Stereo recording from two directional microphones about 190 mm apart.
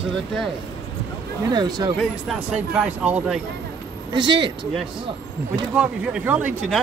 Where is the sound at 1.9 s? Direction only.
5° right (ahead or behind).